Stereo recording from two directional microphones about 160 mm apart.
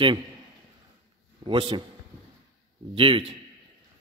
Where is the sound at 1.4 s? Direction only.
30° right (ahead or behind).